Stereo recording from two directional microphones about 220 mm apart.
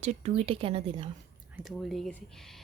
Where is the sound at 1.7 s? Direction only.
Centre (ahead or behind).